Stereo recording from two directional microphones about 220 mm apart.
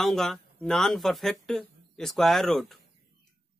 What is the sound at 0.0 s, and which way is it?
Speech, centre (ahead or behind).